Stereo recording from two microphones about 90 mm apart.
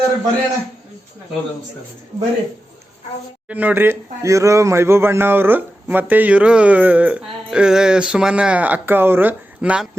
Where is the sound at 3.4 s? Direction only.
20° right (ahead or behind).